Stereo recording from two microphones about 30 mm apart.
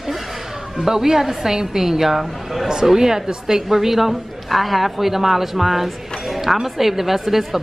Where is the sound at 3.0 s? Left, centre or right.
Centre.